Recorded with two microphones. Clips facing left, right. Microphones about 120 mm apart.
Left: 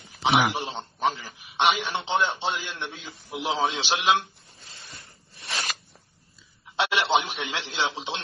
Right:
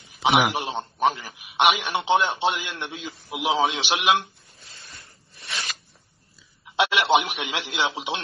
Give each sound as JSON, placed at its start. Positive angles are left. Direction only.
{"t": 0.2, "sound": "a man's voice", "side_deg": -15}
{"t": 5.4, "sound": "a sound", "side_deg": 40}
{"t": 6.8, "sound": "a man's voice", "side_deg": -15}